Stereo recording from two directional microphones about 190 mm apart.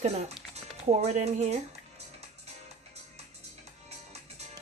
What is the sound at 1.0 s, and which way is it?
Speech, 35° right (ahead or behind).